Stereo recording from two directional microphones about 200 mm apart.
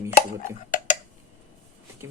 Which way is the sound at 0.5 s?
40° left (ahead or behind).